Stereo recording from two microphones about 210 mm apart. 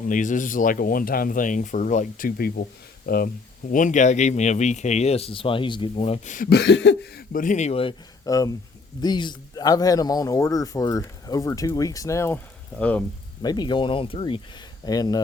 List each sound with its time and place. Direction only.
0.1 s a man's voice: 40° left (ahead or behind); by 13.1 s 5° left (ahead or behind)
13.4 s a man's voice: 20° left (ahead or behind)